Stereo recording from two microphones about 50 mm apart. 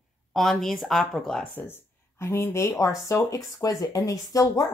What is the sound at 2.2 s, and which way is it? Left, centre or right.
Speech, left.